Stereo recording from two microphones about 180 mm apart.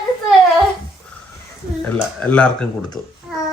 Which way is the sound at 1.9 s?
10° left (ahead or behind).